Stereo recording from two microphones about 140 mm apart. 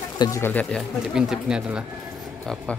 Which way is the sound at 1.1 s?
5° right (ahead or behind).